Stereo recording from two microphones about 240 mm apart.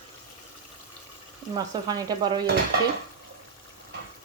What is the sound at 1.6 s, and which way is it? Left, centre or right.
Stir, centre.